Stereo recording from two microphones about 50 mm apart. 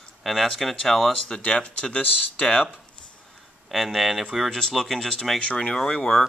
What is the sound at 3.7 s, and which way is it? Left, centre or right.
Speech, centre.